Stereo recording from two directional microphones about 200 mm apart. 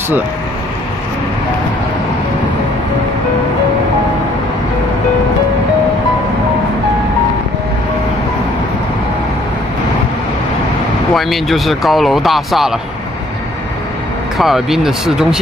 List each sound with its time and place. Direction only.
11.1 s speech: centre (ahead or behind)
14.4 s speech: centre (ahead or behind)